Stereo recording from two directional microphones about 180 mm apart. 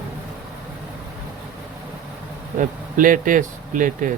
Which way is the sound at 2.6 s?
50° right (ahead or behind).